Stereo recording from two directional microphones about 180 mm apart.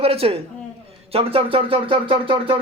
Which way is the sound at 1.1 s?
30° right (ahead or behind).